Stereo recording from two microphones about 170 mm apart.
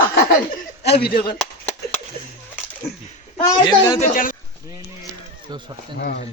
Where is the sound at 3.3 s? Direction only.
25° left (ahead or behind).